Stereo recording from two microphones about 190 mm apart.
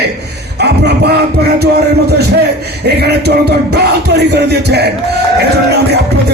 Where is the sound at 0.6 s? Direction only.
60° right (ahead or behind).